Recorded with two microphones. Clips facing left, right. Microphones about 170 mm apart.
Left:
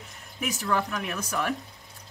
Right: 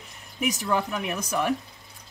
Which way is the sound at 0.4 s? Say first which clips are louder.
Right 2 dB; 15° right (ahead or behind).